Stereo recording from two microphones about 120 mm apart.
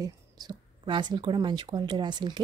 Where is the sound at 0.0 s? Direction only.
40° right (ahead or behind).